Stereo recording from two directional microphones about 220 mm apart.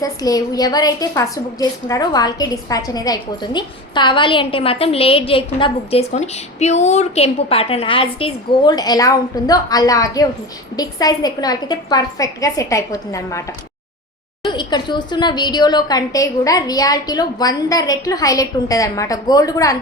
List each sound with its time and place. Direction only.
0.0 s a woman's voice: 15° left (ahead or behind)
14.4 s a woman's voice: 20° left (ahead or behind)